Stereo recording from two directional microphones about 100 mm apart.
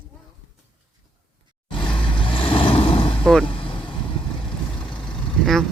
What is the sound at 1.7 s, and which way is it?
Vehicle, 55° left (ahead or behind).